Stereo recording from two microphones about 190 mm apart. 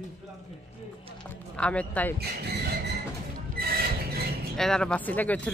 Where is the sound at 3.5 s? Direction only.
55° right (ahead or behind).